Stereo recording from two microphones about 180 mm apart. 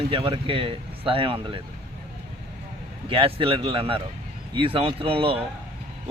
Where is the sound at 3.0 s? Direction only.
30° right (ahead or behind).